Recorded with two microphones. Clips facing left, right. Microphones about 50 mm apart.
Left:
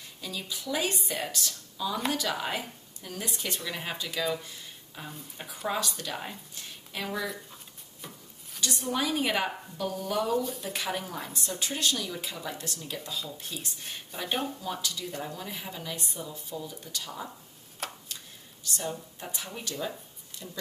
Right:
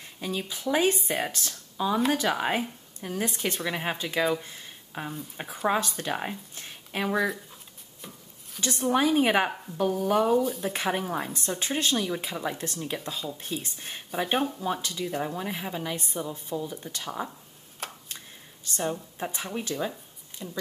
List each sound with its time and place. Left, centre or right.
0.2 s speech: right
8.5 s speech: right
10.4 s speech: centre
10.7 s speech: right